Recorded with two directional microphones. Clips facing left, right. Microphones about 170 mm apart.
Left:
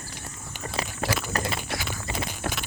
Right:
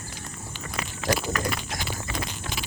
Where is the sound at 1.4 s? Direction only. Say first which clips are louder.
Even; 35° left (ahead or behind).